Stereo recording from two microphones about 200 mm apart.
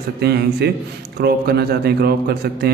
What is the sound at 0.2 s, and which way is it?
A man's voice, 55° right (ahead or behind).